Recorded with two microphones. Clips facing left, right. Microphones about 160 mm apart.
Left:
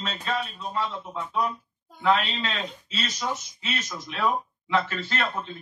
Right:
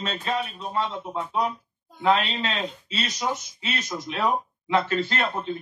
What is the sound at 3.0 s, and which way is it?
Speech, 25° right (ahead or behind).